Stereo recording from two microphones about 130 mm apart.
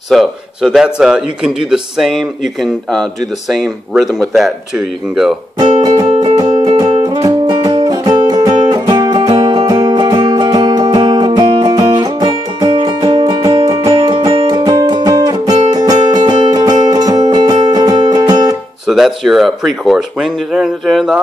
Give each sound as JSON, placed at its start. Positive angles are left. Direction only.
{"t": 0.1, "sound": "a man's voice", "side_deg": -5}
{"t": 5.8, "sound": "music", "side_deg": -35}
{"t": 18.9, "sound": "a man's voice", "side_deg": 0}